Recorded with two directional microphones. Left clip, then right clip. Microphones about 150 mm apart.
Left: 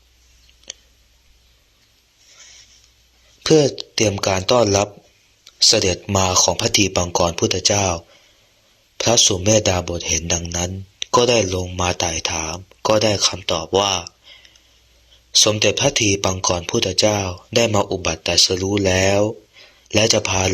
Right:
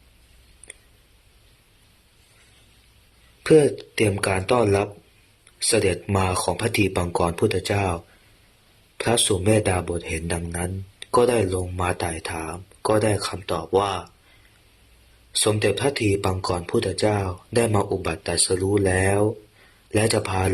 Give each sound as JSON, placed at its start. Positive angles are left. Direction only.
{"t": 3.4, "sound": "speech", "side_deg": 25}
{"t": 15.4, "sound": "speech", "side_deg": 35}